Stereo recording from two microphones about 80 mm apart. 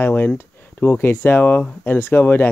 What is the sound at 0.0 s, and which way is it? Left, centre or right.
Speech, left.